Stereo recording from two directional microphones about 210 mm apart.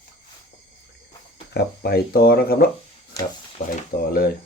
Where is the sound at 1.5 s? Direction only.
50° left (ahead or behind).